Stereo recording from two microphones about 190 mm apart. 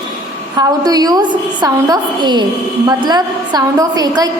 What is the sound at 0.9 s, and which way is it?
A woman's voice, 20° right (ahead or behind).